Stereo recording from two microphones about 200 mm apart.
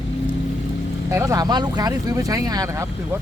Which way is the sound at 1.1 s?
15° right (ahead or behind).